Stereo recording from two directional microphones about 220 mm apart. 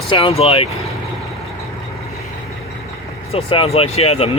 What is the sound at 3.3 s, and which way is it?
Speech, 25° left (ahead or behind).